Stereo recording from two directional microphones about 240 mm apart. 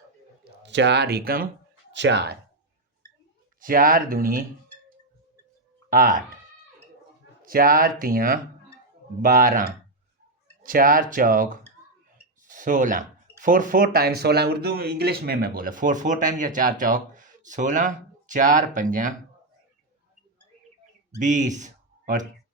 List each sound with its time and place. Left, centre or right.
0.4 s speech: right
3.6 s speech: right
5.9 s speech: right
7.4 s speech: right
21.2 s speech: right